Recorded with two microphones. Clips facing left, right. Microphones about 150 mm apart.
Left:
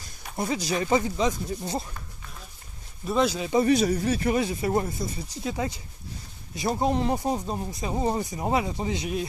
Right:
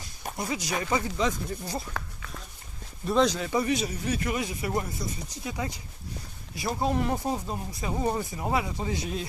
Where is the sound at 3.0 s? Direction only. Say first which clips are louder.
Right 1 dB; 5° left (ahead or behind).